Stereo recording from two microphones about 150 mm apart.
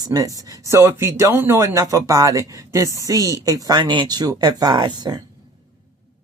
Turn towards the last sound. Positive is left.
turn(degrees=-25)  # may be behind; listen again after turning